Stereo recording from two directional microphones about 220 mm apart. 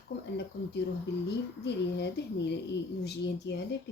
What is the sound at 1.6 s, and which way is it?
Speech, 50° left (ahead or behind).